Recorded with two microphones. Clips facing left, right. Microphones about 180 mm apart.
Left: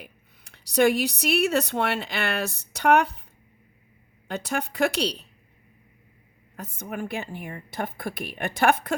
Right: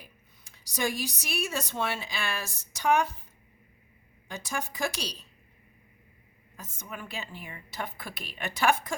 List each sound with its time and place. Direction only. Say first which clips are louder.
0.0 s speech: left 7 dB; 65° left (ahead or behind)
4.3 s a woman's voice: left 6 dB; 65° left (ahead or behind)
6.6 s a woman's voice: left 9 dB; 60° left (ahead or behind)